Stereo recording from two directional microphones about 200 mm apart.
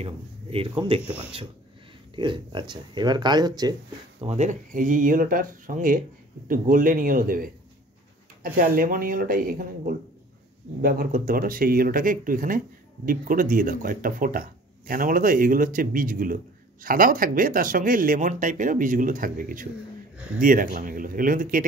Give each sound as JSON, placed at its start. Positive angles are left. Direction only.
{"t": 0.0, "sound": "speech", "side_deg": -30}
{"t": 2.1, "sound": "speech", "side_deg": -25}
{"t": 4.2, "sound": "speech", "side_deg": -30}